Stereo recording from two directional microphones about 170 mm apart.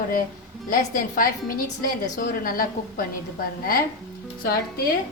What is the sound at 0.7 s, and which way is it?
Chopping, 55° left (ahead or behind).